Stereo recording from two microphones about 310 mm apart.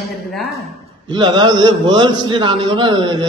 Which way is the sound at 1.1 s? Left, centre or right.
Centre.